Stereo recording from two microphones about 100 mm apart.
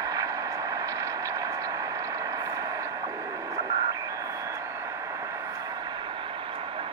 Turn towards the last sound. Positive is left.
turn(degrees=-60)  # may be behind; listen again after turning